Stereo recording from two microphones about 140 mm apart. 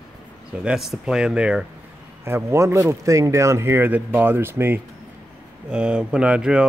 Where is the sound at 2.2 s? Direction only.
20° right (ahead or behind).